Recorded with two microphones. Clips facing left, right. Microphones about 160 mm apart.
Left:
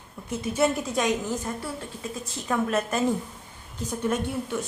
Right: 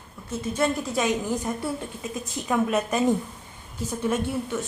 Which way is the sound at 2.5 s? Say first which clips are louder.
Right 2 dB; 5° right (ahead or behind).